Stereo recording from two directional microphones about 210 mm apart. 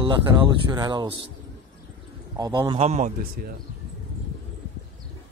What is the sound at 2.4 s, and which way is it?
A man's voice, 20° right (ahead or behind).